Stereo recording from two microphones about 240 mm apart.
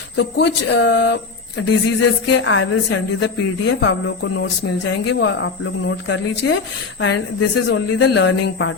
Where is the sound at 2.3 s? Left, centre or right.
Left.